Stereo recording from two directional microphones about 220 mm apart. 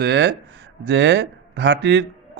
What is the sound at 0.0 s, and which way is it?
A man's voice, 50° right (ahead or behind).